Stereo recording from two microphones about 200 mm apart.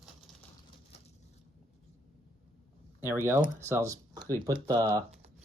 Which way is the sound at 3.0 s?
10° right (ahead or behind).